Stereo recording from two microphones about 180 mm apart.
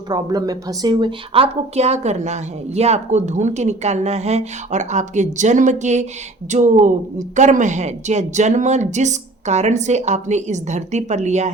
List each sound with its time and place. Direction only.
0.1 s a woman's voice: 20° right (ahead or behind); by 11.5 s 40° right (ahead or behind)